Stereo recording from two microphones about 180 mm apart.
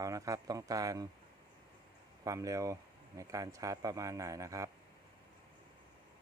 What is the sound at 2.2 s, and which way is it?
A man's voice, 20° right (ahead or behind).